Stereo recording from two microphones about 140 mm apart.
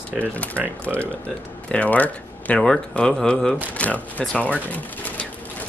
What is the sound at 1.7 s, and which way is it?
Speech, 10° left (ahead or behind).